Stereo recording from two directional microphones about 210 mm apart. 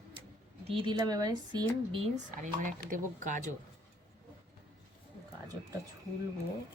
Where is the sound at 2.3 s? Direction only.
40° right (ahead or behind).